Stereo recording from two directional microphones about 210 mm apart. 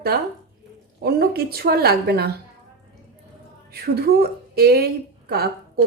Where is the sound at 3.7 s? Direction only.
45° right (ahead or behind).